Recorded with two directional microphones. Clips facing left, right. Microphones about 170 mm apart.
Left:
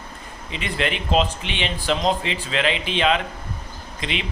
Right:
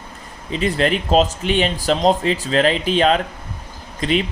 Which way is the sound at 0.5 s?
40° right (ahead or behind).